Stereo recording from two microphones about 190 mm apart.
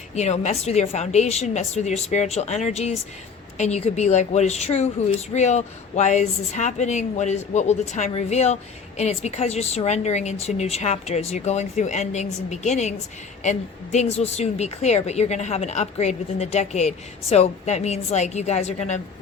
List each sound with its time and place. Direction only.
0.1 s a woman's voice: 35° left (ahead or behind)